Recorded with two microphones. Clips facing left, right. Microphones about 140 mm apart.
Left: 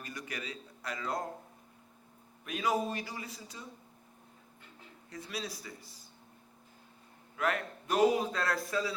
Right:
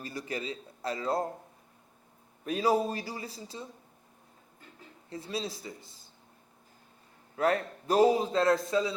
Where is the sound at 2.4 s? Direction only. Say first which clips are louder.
Right 5 dB; 35° right (ahead or behind).